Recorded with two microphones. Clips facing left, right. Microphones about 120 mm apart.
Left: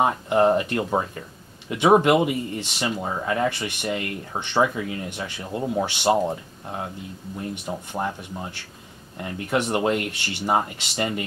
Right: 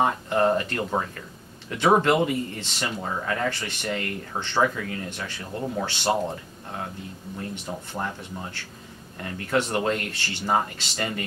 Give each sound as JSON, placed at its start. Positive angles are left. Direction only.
{"t": 0.0, "sound": "speech", "side_deg": 20}
{"t": 7.5, "sound": "speech", "side_deg": 15}